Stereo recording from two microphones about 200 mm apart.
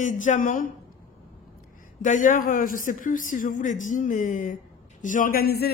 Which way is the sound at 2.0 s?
40° left (ahead or behind).